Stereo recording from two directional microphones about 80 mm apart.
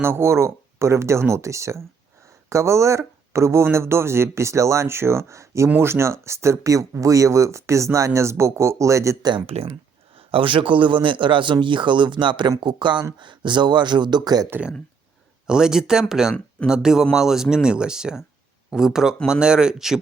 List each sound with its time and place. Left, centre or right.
0.0 s speech: right
2.2 s a sound: right
3.3 s speech: right
10.4 s speech: right
15.4 s speech: centre